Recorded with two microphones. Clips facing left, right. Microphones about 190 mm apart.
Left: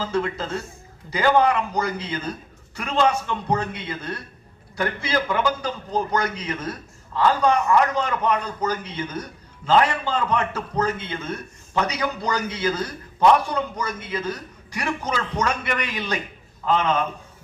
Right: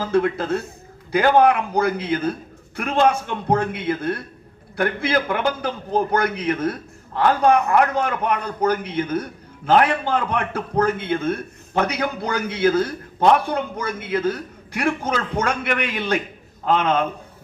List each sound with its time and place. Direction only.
0.0 s a man's voice: 60° right (ahead or behind)